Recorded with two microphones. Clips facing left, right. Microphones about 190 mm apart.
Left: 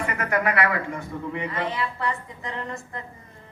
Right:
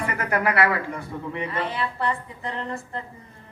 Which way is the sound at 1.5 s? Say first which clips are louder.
Right 1 dB; 30° right (ahead or behind).